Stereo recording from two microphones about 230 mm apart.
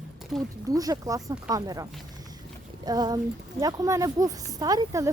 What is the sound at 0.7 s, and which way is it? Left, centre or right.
A woman's voice, centre.